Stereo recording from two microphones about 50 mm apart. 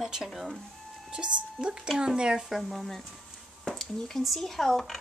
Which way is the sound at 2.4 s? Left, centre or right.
Centre.